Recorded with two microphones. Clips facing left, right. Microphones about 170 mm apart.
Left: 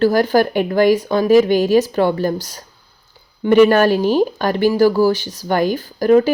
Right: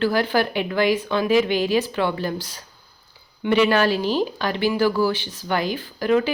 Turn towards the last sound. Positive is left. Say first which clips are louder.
# left 7 dB
turn(degrees=40)  # may be behind; listen again after turning